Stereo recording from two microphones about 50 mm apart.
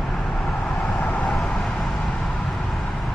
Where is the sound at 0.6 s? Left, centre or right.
Centre.